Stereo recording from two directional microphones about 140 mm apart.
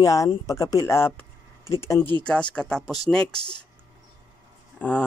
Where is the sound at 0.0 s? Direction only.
25° left (ahead or behind).